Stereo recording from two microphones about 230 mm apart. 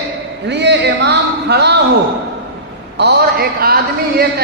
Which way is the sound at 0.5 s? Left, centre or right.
Right.